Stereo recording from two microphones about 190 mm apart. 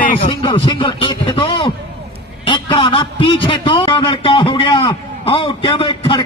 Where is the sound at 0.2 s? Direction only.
25° left (ahead or behind).